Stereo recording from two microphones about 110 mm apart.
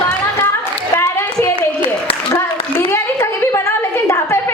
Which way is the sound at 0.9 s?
25° left (ahead or behind).